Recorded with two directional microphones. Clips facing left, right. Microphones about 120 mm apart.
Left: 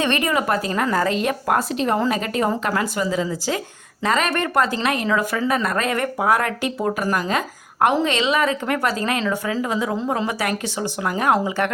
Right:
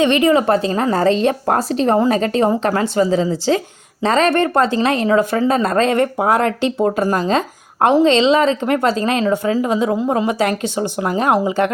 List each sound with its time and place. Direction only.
0.0 s speech: 20° right (ahead or behind)